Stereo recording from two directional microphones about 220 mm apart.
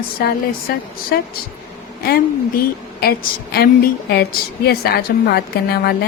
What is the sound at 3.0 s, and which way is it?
A woman's voice, 45° left (ahead or behind).